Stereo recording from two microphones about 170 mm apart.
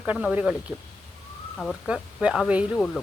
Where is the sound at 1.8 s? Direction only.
5° right (ahead or behind).